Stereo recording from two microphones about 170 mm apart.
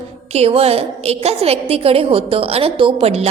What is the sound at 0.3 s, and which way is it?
A woman's voice, 35° right (ahead or behind).